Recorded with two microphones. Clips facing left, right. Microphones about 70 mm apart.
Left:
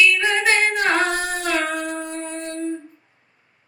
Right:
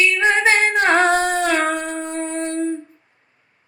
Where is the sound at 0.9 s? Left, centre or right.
Right.